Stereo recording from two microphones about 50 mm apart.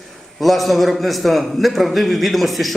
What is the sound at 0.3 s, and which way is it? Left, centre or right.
A man's voice, centre.